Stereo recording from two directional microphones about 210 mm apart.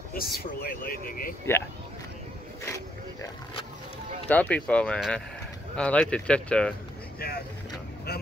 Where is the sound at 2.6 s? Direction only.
15° left (ahead or behind).